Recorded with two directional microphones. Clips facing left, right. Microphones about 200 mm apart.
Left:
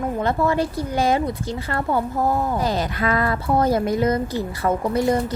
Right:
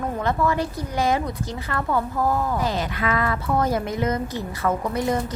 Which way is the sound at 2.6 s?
40° left (ahead or behind).